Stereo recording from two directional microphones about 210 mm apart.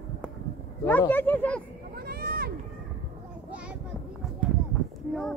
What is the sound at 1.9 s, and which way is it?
Sheep, 45° right (ahead or behind).